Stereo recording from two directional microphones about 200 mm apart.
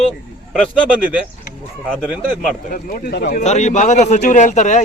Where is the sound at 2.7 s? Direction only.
55° left (ahead or behind).